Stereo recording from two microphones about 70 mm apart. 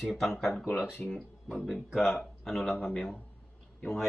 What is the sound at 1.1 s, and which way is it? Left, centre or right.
Speech, centre.